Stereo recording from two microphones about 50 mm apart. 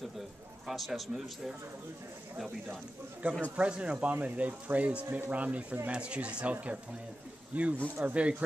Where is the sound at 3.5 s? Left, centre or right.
Right.